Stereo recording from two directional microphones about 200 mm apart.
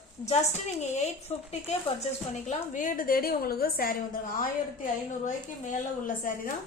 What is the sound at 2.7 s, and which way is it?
A woman's voice, 40° left (ahead or behind).